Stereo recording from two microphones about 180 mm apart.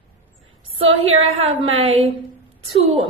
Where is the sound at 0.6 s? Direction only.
35° right (ahead or behind).